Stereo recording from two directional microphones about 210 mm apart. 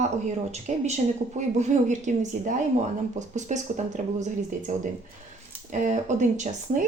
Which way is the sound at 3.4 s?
35° right (ahead or behind).